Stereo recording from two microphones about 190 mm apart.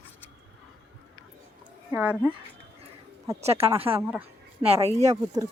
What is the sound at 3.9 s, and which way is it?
Speech, 10° right (ahead or behind).